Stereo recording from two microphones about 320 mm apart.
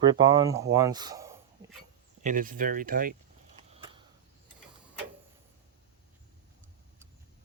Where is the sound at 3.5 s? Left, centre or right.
Centre.